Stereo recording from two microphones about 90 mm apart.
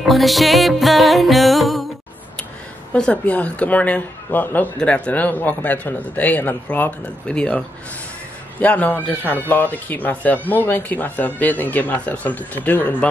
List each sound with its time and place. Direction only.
0.0 s music: centre (ahead or behind)
2.9 s speech: 15° left (ahead or behind)